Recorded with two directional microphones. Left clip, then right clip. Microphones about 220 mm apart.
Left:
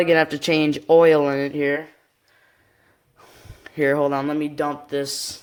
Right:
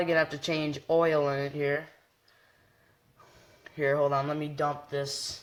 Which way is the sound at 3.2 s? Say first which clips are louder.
Left 8 dB; 45° left (ahead or behind).